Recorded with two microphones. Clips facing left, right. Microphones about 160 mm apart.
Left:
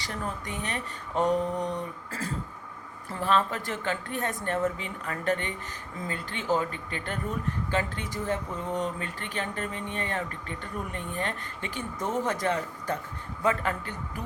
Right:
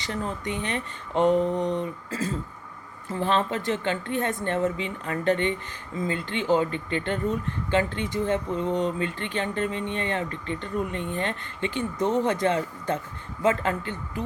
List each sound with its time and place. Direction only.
0.0 s speech: 25° right (ahead or behind)